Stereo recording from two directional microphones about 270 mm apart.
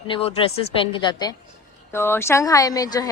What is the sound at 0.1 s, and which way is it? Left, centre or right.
A woman's voice, left.